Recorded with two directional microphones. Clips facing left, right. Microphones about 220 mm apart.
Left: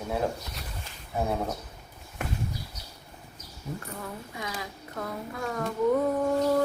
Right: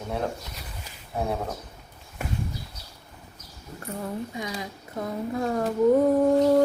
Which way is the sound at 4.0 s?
25° right (ahead or behind).